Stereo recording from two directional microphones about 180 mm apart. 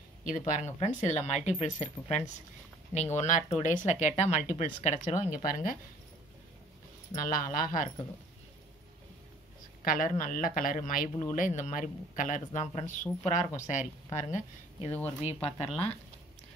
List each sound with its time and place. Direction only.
0.2 s speech: 45° left (ahead or behind)
7.2 s speech: 50° left (ahead or behind)
9.8 s speech: 50° left (ahead or behind)